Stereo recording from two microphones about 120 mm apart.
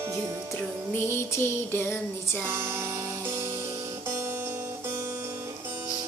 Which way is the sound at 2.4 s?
20° right (ahead or behind).